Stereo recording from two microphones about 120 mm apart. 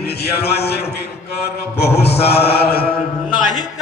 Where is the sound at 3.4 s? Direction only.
35° left (ahead or behind).